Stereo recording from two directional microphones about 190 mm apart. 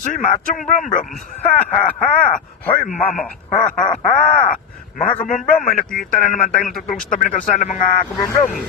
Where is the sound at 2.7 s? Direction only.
30° left (ahead or behind).